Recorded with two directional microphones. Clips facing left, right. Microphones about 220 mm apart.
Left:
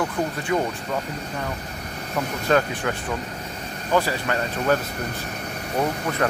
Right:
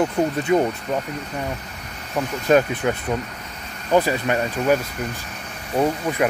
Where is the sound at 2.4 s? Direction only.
20° right (ahead or behind).